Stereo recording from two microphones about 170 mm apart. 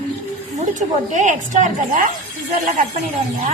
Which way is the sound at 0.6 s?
45° right (ahead or behind).